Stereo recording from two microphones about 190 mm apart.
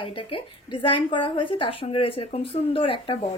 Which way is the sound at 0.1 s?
25° left (ahead or behind).